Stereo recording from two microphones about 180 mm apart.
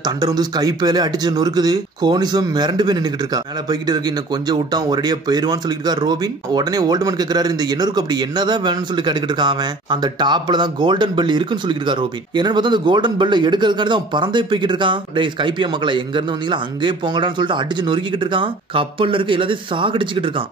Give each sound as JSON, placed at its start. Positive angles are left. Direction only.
{"t": 0.2, "sound": "speech", "side_deg": -20}
{"t": 4.5, "sound": "speech", "side_deg": -25}